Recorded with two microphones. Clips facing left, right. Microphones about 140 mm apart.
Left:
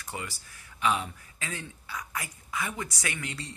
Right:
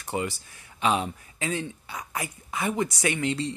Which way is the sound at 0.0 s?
25° right (ahead or behind).